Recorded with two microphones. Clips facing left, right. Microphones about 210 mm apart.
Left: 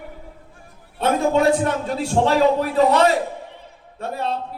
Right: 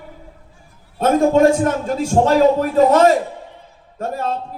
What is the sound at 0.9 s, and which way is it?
A man's voice, 45° right (ahead or behind).